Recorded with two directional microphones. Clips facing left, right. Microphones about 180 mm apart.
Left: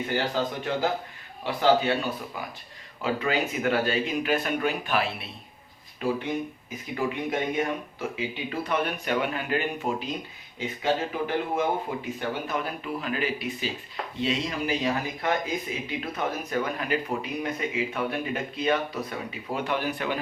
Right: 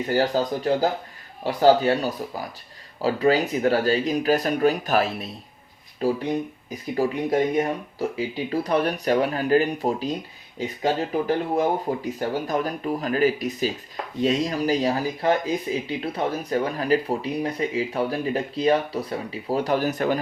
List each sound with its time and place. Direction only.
0.1 s speech: 40° right (ahead or behind)